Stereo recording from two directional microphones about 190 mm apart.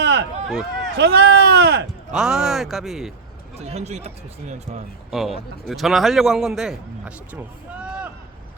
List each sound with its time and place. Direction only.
0.0 s run: 65° right (ahead or behind)
0.9 s speech: 60° right (ahead or behind)
2.1 s a man's voice: 5° right (ahead or behind)
3.6 s speech: 35° right (ahead or behind)
5.1 s a man's voice: centre (ahead or behind)